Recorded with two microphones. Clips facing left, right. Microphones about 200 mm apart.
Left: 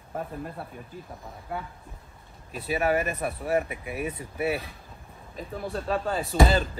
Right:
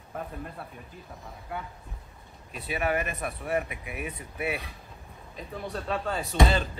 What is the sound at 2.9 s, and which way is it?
Speech, 35° left (ahead or behind).